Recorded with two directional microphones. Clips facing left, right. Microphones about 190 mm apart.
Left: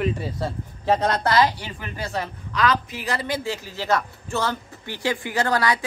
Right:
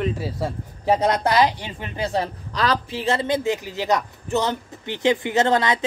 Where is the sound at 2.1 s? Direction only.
35° right (ahead or behind).